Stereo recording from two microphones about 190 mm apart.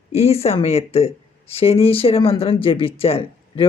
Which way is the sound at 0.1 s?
35° left (ahead or behind).